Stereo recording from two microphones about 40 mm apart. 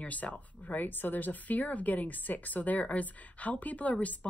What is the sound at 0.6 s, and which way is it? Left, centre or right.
Speech, left.